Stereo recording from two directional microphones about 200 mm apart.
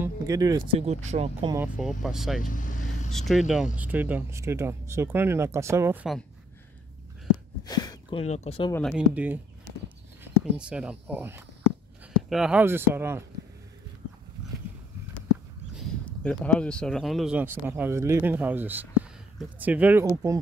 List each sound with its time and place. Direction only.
0.0 s speech: 15° right (ahead or behind)
0.7 s speech: 30° right (ahead or behind)
1.8 s speech: centre (ahead or behind)
2.4 s vehicle: 40° left (ahead or behind)
3.1 s speech: centre (ahead or behind)
7.6 s speech: 20° left (ahead or behind)
8.9 s speech: 10° right (ahead or behind)
16.3 s speech: 5° left (ahead or behind); by 20.3 s 15° right (ahead or behind)